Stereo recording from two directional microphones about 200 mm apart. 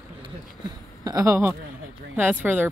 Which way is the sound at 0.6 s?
20° right (ahead or behind).